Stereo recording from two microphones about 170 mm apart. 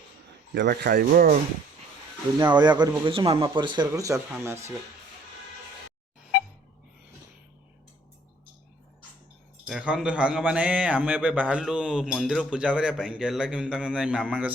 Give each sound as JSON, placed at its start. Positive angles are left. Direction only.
{"t": 0.5, "sound": "speech", "side_deg": -75}
{"t": 2.6, "sound": "speech", "side_deg": -25}
{"t": 9.6, "sound": "a man's voice", "side_deg": -5}